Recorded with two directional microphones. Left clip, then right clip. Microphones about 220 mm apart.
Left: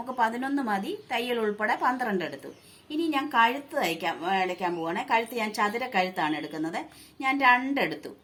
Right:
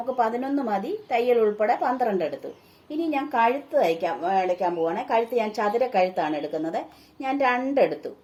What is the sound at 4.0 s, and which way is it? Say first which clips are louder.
A woman's voice: right 3 dB; 40° left (ahead or behind).